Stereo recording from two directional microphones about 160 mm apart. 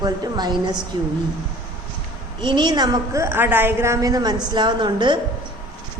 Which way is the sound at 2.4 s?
30° right (ahead or behind).